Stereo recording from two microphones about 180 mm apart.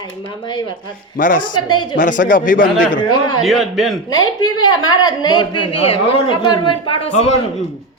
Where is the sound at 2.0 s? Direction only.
45° left (ahead or behind).